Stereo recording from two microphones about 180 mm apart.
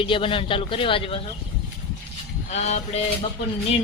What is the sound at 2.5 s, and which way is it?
Speech, 40° left (ahead or behind).